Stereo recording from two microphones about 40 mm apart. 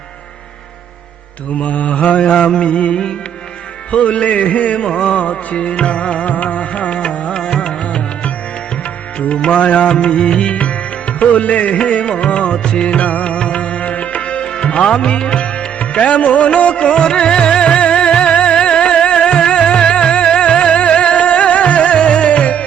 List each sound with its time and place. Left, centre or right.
1.5 s a man's voice: left
2.3 s mantra: centre
2.6 s music: left
3.9 s a man's voice: left
5.1 s a man's voice: left
6.3 s music: left
9.2 s music: left
16.8 s music: centre